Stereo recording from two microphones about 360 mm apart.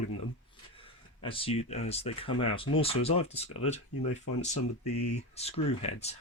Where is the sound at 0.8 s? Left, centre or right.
Centre.